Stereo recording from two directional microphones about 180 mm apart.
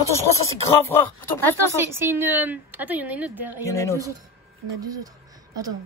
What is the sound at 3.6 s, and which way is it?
Speech, 15° left (ahead or behind).